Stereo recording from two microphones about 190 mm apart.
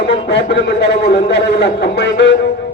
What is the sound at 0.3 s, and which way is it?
A man's voice, 60° left (ahead or behind).